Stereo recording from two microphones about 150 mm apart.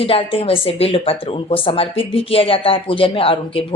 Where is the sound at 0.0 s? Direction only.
40° left (ahead or behind).